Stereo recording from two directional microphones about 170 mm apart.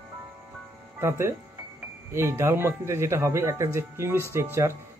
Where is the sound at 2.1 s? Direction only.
15° right (ahead or behind).